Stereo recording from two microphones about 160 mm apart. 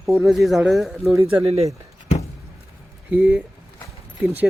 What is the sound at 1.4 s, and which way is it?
Speech, 35° right (ahead or behind).